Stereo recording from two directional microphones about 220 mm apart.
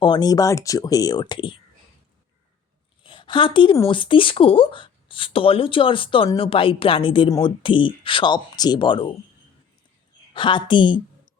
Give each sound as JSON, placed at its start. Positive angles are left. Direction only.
{"t": 0.0, "sound": "speech", "side_deg": 20}
{"t": 3.0, "sound": "speech", "side_deg": 20}
{"t": 10.3, "sound": "speech", "side_deg": 20}